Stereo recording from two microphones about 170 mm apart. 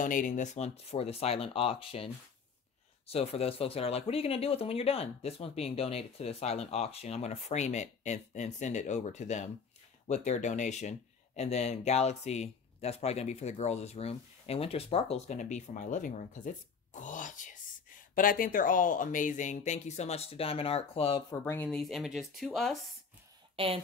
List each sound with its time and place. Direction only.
0.0 s speech: 50° left (ahead or behind); by 2.0 s 35° left (ahead or behind)
3.1 s speech: 35° left (ahead or behind)
21.3 s speech: 15° left (ahead or behind)
21.6 s speech: centre (ahead or behind)
23.5 s speech: 35° right (ahead or behind)